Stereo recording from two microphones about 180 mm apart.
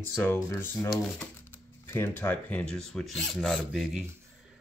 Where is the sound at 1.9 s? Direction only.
10° left (ahead or behind).